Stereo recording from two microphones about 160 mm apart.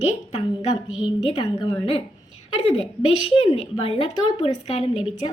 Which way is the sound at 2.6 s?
35° left (ahead or behind).